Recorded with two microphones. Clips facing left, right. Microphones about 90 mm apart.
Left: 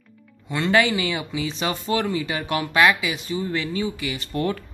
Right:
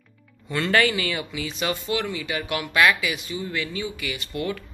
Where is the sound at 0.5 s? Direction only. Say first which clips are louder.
Left 2 dB; 15° left (ahead or behind).